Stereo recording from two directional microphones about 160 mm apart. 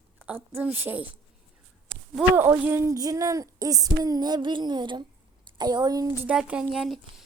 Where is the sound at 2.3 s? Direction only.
15° right (ahead or behind).